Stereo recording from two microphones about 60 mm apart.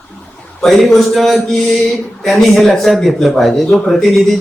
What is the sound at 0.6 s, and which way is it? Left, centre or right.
Speech, centre.